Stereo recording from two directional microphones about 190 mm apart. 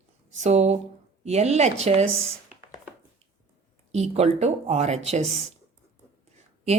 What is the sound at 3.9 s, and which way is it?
Speech, 35° right (ahead or behind).